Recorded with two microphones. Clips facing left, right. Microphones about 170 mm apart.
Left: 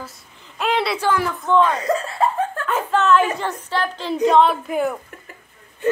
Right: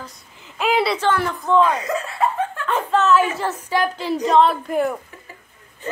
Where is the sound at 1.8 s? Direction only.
30° left (ahead or behind).